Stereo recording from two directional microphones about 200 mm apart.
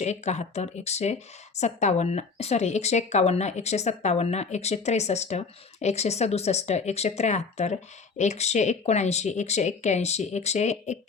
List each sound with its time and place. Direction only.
0.0 s speech: 35° left (ahead or behind)